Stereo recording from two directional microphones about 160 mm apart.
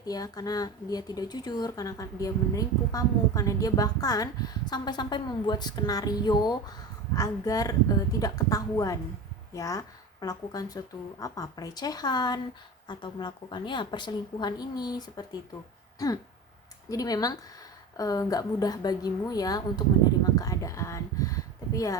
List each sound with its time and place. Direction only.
0.0 s a woman's voice: 25° left (ahead or behind)
16.9 s speech: 25° left (ahead or behind)
20.3 s a sound: 20° left (ahead or behind)